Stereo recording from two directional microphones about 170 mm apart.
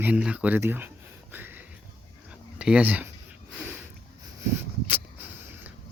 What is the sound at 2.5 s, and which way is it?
Speech, 5° right (ahead or behind).